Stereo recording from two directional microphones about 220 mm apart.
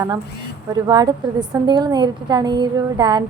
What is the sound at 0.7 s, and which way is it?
A woman's voice, 20° right (ahead or behind).